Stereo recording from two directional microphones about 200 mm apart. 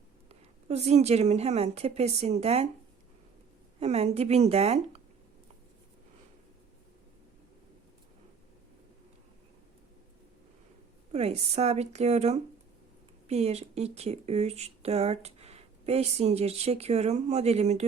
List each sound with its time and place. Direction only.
0.3 s speech: 30° right (ahead or behind)
3.8 s speech: 30° right (ahead or behind)
11.1 s speech: 30° right (ahead or behind)